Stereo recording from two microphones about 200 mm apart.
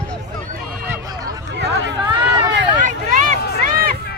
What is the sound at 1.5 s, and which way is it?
Chatter, 60° right (ahead or behind).